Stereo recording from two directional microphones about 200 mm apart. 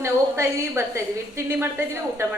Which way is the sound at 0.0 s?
10° right (ahead or behind).